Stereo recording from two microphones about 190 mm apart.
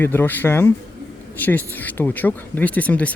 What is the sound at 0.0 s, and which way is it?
Speech, 10° left (ahead or behind).